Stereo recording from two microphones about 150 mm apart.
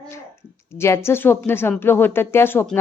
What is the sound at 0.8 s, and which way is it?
A woman's voice, 15° left (ahead or behind).